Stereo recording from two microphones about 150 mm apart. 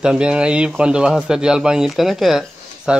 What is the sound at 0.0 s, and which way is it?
Speech, 5° right (ahead or behind).